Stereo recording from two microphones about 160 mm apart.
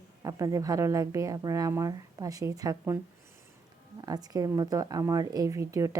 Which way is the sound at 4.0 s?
25° right (ahead or behind).